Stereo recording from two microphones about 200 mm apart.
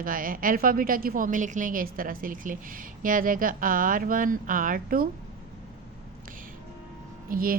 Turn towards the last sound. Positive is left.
turn(degrees=-45)  # may be behind; listen again after turning